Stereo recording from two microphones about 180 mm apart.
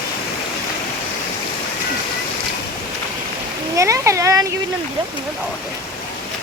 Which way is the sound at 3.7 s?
15° right (ahead or behind).